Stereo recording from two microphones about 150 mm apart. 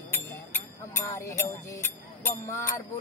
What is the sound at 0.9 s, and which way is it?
Music, 20° left (ahead or behind).